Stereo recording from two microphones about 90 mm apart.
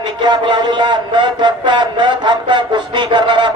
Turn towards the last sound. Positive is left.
turn(degrees=-55)  # may be behind; listen again after turning